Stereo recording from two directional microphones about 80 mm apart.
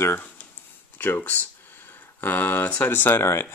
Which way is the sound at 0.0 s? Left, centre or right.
Left.